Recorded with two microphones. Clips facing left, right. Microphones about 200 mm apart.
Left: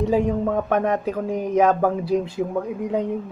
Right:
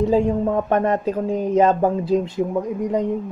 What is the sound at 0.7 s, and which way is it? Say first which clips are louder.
Speech: right 2 dB; 5° left (ahead or behind).